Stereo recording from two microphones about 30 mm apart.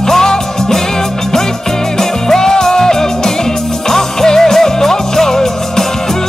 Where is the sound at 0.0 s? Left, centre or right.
Centre.